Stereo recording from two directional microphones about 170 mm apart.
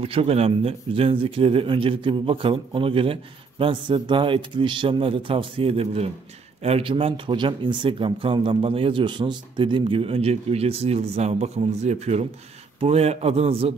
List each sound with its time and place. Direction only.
0.0 s speech: 35° right (ahead or behind)